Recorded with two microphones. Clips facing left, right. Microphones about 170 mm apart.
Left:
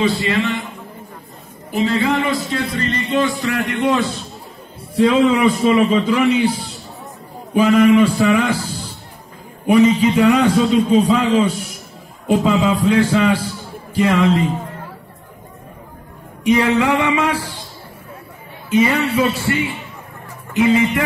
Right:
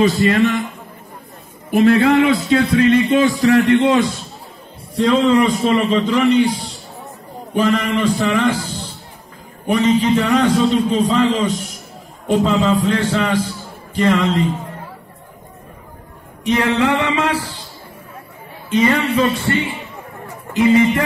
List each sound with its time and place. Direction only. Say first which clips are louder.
0.0 s a man's voice: right 4 dB; 45° right (ahead or behind)
1.7 s a man's voice: right 5 dB; 60° right (ahead or behind); by 3.9 s 30° right (ahead or behind)
4.9 s a man's voice: even; 5° left (ahead or behind)
7.5 s a man's voice: left 5 dB; 10° left (ahead or behind)
16.4 s a man's voice: left 1 dB; 10° left (ahead or behind)
18.7 s a man's voice: even; 10° left (ahead or behind)